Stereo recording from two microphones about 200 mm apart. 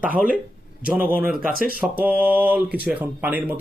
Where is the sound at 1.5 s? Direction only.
45° right (ahead or behind).